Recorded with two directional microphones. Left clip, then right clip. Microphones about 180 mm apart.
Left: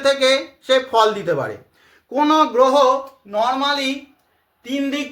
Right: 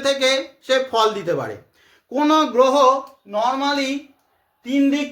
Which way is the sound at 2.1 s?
25° right (ahead or behind).